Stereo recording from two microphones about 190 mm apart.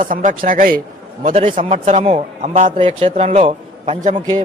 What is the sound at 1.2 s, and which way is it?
A man's voice, 35° right (ahead or behind).